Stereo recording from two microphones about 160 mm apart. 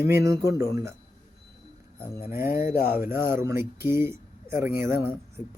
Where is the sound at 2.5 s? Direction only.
60° left (ahead or behind).